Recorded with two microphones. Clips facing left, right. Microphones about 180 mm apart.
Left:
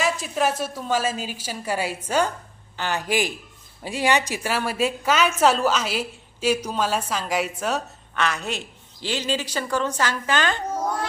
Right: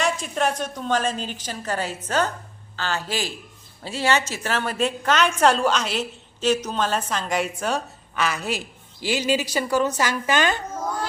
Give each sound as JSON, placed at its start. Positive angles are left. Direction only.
{"t": 0.0, "sound": "a woman's voice", "side_deg": 5}